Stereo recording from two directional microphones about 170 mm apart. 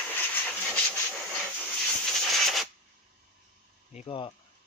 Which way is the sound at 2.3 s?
Centre (ahead or behind).